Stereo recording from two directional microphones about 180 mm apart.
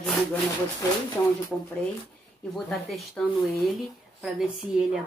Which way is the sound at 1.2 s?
15° left (ahead or behind).